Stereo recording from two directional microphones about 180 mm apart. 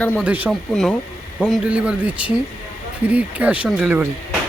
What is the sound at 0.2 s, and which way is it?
Speech, 10° right (ahead or behind).